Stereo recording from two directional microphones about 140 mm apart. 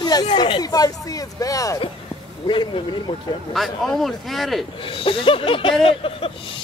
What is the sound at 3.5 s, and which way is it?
Speech, centre (ahead or behind).